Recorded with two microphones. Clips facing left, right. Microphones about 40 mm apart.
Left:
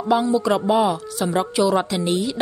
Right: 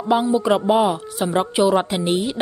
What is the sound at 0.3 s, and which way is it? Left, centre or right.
A woman's voice, right.